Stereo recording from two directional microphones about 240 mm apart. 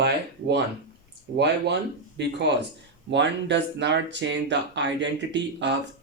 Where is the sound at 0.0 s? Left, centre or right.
Right.